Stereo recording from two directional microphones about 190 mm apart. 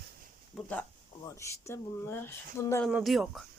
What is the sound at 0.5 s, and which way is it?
Speech, 10° left (ahead or behind).